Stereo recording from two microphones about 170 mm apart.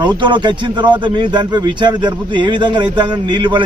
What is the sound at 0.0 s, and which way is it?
A man's voice, 25° right (ahead or behind).